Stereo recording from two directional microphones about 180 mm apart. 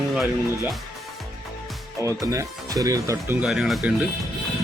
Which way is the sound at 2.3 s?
20° right (ahead or behind).